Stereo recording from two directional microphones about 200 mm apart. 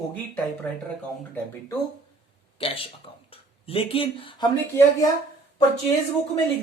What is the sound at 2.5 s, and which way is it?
Speech, 30° left (ahead or behind).